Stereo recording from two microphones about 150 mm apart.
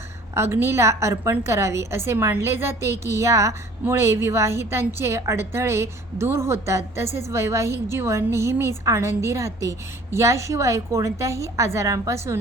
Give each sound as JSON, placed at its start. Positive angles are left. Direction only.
{"t": 0.3, "sound": "a woman's voice", "side_deg": -15}